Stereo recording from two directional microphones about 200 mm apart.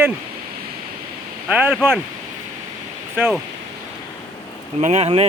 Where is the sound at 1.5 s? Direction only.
5° right (ahead or behind).